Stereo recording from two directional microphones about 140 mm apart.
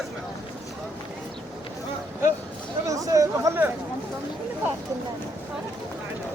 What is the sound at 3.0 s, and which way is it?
Chatter, 25° right (ahead or behind).